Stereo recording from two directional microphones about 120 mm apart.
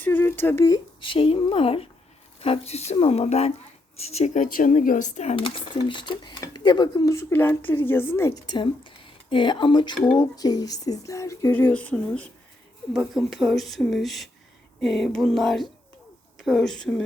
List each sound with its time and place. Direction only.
0.0 s speech: 15° left (ahead or behind)
1.1 s speech: 50° left (ahead or behind)
6.9 s a woman's voice: 25° left (ahead or behind)
8.4 s speech: 40° left (ahead or behind); by 11.5 s 25° left (ahead or behind)
11.5 s speech: 15° left (ahead or behind)
12.9 s speech: centre (ahead or behind)